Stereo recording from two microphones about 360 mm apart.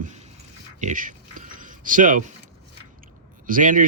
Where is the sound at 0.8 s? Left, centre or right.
Right.